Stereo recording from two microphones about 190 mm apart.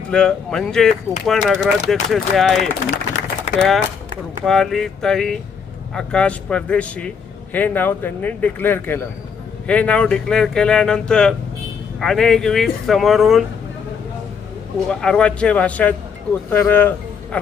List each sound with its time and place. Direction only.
0.1 s speech: 5° left (ahead or behind)
2.9 s a sound: 40° left (ahead or behind)
4.4 s speech: centre (ahead or behind)
14.8 s speech: 5° left (ahead or behind)